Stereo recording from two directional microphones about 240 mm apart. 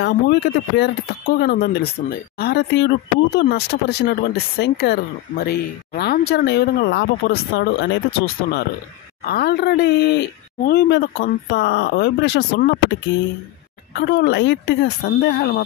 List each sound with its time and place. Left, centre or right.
0.0 s speech: left
13.9 s speech: left